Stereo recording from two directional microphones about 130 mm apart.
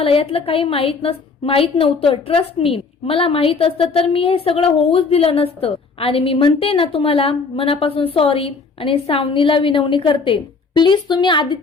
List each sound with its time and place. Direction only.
0.0 s a woman's voice: 45° left (ahead or behind)